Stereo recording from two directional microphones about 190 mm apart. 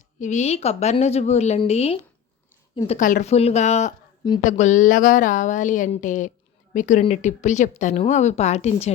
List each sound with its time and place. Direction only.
0.2 s a woman's voice: 40° left (ahead or behind)